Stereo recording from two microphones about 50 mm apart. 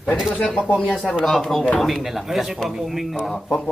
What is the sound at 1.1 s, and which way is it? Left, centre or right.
A man's voice, centre.